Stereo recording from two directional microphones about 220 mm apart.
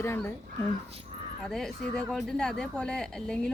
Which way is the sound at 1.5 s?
Centre (ahead or behind).